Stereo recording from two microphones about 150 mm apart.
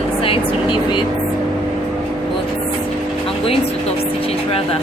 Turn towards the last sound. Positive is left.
turn(degrees=40)  # may be behind; listen again after turning